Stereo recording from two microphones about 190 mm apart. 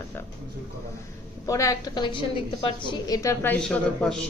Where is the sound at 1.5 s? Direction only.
15° left (ahead or behind).